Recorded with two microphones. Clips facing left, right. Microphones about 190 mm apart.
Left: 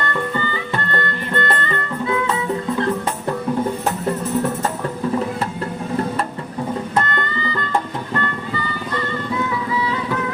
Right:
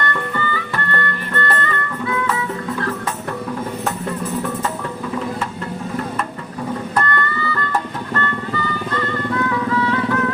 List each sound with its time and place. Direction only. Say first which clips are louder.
0.3 s music: even; 20° left (ahead or behind)
6.9 s music: right 3 dB; 15° left (ahead or behind)